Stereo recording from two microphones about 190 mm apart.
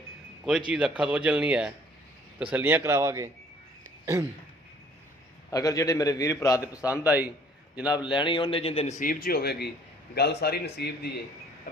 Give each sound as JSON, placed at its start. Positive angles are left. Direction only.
{"t": 0.4, "sound": "speech", "side_deg": -5}
{"t": 5.5, "sound": "a man's voice", "side_deg": 15}
{"t": 7.8, "sound": "speech", "side_deg": -5}
{"t": 8.0, "sound": "a man's voice", "side_deg": 25}